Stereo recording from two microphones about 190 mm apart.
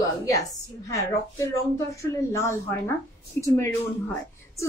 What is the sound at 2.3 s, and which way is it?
A woman's voice, 15° left (ahead or behind).